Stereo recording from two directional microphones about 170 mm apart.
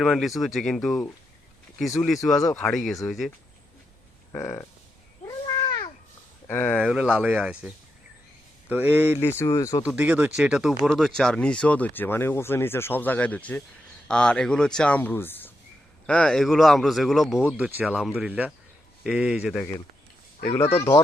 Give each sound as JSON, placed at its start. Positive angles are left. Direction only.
{"t": 0.0, "sound": "speech", "side_deg": 0}
{"t": 2.6, "sound": "speech", "side_deg": 0}
{"t": 4.3, "sound": "speech", "side_deg": 15}
{"t": 5.5, "sound": "cat", "side_deg": 20}
{"t": 6.5, "sound": "speech", "side_deg": 10}
{"t": 6.7, "sound": "speech", "side_deg": -5}
{"t": 8.7, "sound": "speech", "side_deg": -10}
{"t": 9.4, "sound": "speech", "side_deg": 15}
{"t": 9.8, "sound": "speech", "side_deg": -10}
{"t": 20.5, "sound": "speech", "side_deg": 15}